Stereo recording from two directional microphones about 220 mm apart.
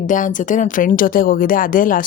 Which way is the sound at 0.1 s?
35° left (ahead or behind).